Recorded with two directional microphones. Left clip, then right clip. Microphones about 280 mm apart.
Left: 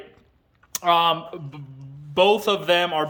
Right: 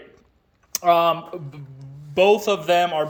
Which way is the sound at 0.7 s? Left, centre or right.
Centre.